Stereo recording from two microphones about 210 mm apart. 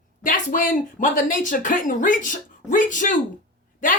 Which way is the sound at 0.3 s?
40° left (ahead or behind).